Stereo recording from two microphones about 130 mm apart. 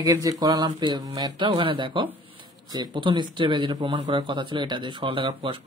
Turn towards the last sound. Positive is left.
turn(degrees=-45)  # may be behind; listen again after turning